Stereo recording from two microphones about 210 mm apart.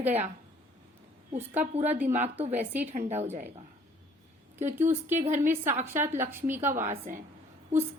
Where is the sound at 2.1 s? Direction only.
30° right (ahead or behind).